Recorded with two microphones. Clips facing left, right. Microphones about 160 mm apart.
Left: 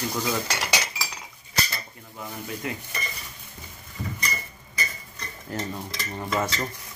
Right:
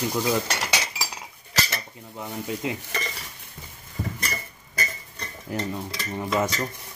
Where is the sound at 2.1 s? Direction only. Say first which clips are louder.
Right 4 dB; 20° right (ahead or behind).